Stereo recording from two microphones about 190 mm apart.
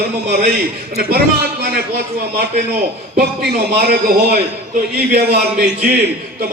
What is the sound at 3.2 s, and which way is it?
A man's voice, 55° right (ahead or behind).